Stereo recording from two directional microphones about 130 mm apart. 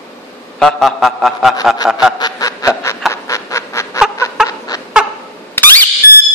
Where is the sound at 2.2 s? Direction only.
30° left (ahead or behind).